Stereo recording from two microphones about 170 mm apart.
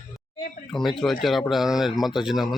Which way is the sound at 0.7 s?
Centre (ahead or behind).